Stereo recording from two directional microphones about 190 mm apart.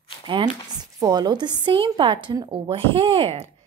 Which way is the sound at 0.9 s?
20° right (ahead or behind).